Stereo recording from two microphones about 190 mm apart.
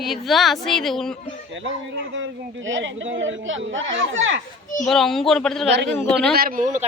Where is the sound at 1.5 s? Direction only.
80° right.